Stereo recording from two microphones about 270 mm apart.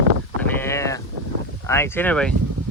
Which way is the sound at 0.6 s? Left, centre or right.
Centre.